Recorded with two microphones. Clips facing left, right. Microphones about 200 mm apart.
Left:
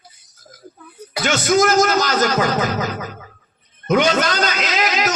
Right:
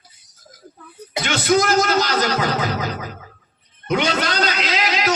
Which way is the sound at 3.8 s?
45° left (ahead or behind).